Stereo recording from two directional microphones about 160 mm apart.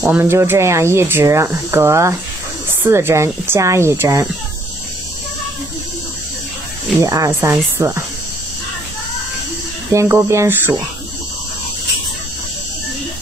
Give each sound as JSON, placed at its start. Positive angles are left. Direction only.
{"t": 0.0, "sound": "speech", "side_deg": -15}
{"t": 7.0, "sound": "speech", "side_deg": -20}
{"t": 9.9, "sound": "speech", "side_deg": -15}